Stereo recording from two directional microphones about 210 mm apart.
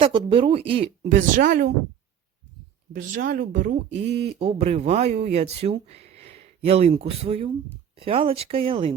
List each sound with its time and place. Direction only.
0.0 s speech: 25° right (ahead or behind)
1.3 s speech: 40° right (ahead or behind)
2.9 s speech: 45° right (ahead or behind)
4.1 s speech: 30° right (ahead or behind)